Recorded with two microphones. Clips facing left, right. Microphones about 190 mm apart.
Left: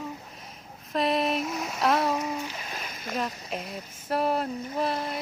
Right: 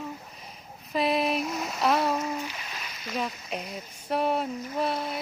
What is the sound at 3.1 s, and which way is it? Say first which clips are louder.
Speech: even; centre (ahead or behind).